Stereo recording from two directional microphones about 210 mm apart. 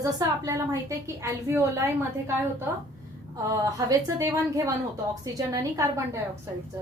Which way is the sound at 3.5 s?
15° right (ahead or behind).